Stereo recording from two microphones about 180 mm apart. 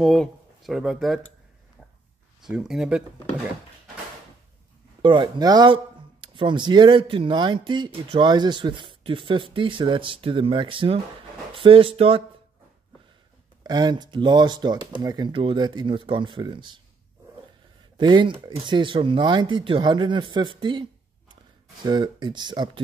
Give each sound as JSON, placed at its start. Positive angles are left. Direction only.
{"t": 0.0, "sound": "speech", "side_deg": 0}
{"t": 2.4, "sound": "speech", "side_deg": 0}
{"t": 5.0, "sound": "speech", "side_deg": -25}
{"t": 13.7, "sound": "speech", "side_deg": -25}
{"t": 17.9, "sound": "speech", "side_deg": -25}